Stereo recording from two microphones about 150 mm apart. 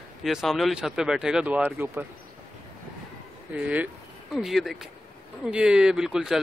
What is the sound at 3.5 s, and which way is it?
Speech, 10° right (ahead or behind).